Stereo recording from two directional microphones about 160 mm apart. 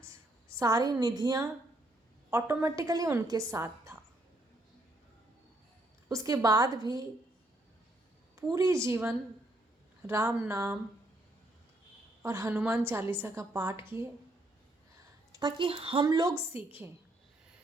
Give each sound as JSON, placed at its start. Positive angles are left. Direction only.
{"t": 0.0, "sound": "a sound", "side_deg": -20}
{"t": 2.3, "sound": "a woman's voice", "side_deg": -15}
{"t": 6.1, "sound": "a woman's voice", "side_deg": -20}
{"t": 8.5, "sound": "a woman's voice", "side_deg": -20}
{"t": 12.2, "sound": "a woman's voice", "side_deg": -15}
{"t": 15.3, "sound": "a woman's voice", "side_deg": -25}
{"t": 16.0, "sound": "a woman's voice", "side_deg": -25}